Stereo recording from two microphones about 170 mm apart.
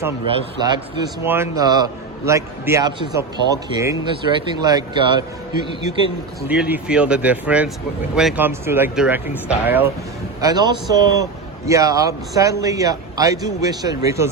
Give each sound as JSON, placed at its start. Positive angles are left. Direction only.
{"t": 0.3, "sound": "speech", "side_deg": -25}
{"t": 6.5, "sound": "speech", "side_deg": -5}
{"t": 10.4, "sound": "speech", "side_deg": -25}